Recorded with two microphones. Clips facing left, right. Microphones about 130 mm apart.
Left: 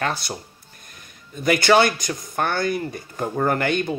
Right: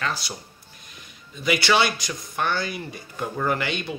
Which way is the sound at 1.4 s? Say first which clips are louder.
Left 5 dB; 45° left (ahead or behind).